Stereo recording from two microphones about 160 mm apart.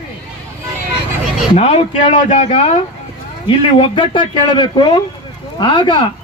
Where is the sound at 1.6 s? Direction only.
45° left (ahead or behind).